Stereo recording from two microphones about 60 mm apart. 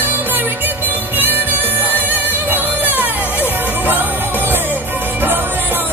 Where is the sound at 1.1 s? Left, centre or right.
Right.